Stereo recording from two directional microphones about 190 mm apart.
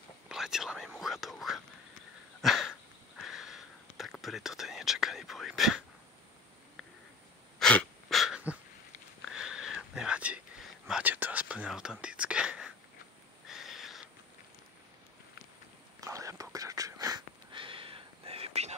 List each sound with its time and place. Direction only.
0.3 s whispering: 5° right (ahead or behind)
2.4 s dog: centre (ahead or behind)
3.2 s whispering: centre (ahead or behind)
7.5 s wheeze: 5° left (ahead or behind)
9.3 s whispering: 5° right (ahead or behind)
13.5 s owl: centre (ahead or behind)
16.0 s whispering: 15° right (ahead or behind); by 18.8 s 35° right (ahead or behind)